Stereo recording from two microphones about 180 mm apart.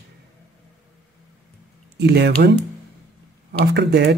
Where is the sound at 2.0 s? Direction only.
65° right (ahead or behind).